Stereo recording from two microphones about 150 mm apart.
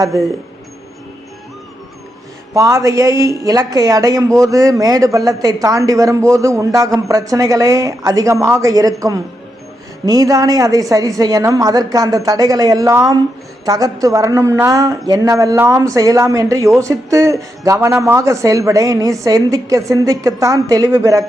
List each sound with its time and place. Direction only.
2.5 s a woman's voice: 20° right (ahead or behind)